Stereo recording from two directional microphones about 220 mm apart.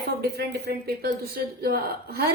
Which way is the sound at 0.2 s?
45° right (ahead or behind).